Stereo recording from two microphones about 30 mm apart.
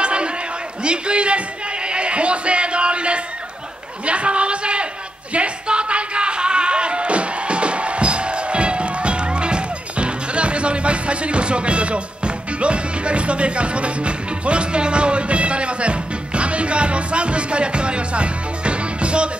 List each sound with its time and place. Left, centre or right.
0.0 s crowd: right
0.8 s a man's voice: right
1.9 s music: right
4.0 s a sound: right
5.3 s music: right